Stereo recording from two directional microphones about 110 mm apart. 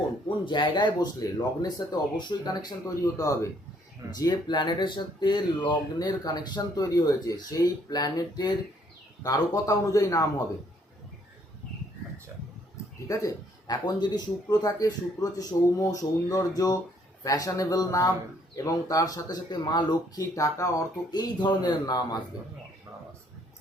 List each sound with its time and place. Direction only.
0.4 s speech: 45° left (ahead or behind)
13.1 s speech: 35° left (ahead or behind)